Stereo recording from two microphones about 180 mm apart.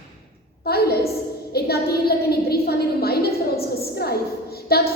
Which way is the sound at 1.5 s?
60° left (ahead or behind).